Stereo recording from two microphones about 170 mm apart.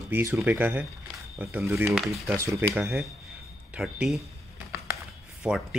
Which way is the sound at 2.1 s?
15° right (ahead or behind).